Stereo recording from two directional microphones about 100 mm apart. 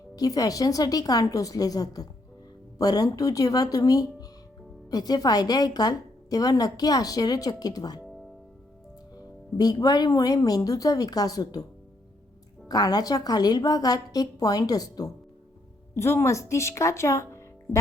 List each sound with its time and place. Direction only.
0.2 s a woman's voice: 40° left (ahead or behind)
9.1 s a woman's voice: 40° left (ahead or behind)
12.6 s a woman's voice: 40° left (ahead or behind)
16.0 s speech: 25° left (ahead or behind)